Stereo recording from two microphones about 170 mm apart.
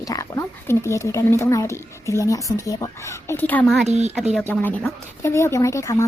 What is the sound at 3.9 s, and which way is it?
Speech, 40° right (ahead or behind).